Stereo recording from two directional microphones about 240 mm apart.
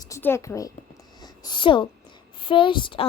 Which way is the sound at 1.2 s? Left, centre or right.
Centre.